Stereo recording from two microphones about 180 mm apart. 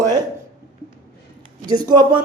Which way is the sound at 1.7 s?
20° right (ahead or behind).